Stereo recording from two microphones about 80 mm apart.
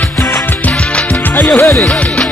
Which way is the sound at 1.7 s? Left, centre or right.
Centre.